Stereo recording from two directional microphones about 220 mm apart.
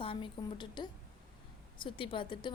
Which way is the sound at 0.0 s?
25° left (ahead or behind).